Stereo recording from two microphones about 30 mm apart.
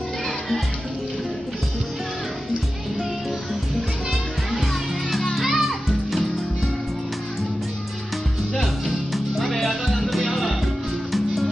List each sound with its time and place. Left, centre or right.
4.1 s music: centre
8.5 s music: centre